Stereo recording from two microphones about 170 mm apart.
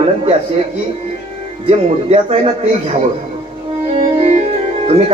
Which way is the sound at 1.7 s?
40° right (ahead or behind).